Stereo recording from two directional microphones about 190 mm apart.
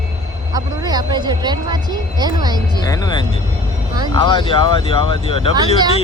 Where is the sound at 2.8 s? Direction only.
20° left (ahead or behind).